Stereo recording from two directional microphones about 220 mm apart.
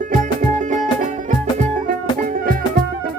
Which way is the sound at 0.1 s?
35° right (ahead or behind).